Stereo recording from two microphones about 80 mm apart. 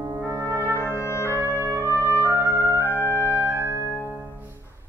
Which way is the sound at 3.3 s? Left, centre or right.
Right.